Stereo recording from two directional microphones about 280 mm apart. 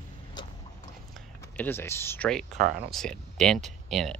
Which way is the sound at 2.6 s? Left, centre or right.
Right.